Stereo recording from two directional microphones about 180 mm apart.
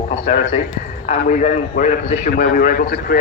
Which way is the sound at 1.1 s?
45° left (ahead or behind).